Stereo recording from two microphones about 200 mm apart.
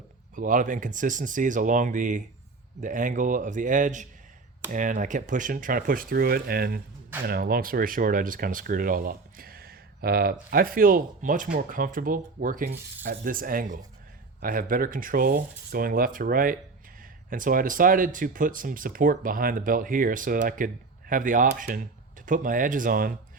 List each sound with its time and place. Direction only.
0.3 s speech: 40° right (ahead or behind)